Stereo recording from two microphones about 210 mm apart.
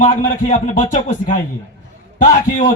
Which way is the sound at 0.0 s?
40° left (ahead or behind).